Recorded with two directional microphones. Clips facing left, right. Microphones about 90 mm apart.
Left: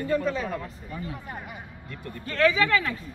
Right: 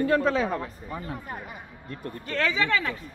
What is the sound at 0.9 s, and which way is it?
Speech, 45° right (ahead or behind).